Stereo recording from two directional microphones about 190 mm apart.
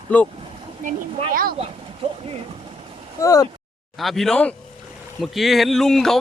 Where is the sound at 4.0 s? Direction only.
Centre (ahead or behind).